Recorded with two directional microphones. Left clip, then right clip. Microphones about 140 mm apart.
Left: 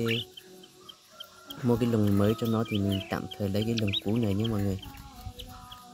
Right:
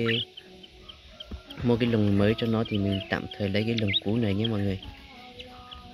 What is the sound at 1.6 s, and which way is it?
Speech, 10° left (ahead or behind).